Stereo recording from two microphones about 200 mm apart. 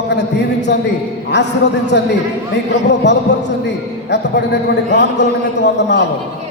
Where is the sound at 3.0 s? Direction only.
60° left (ahead or behind).